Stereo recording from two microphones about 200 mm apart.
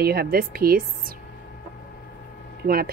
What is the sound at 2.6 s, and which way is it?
Speech, 50° right (ahead or behind).